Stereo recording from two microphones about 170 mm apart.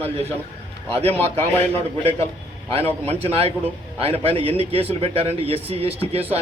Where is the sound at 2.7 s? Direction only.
35° right (ahead or behind).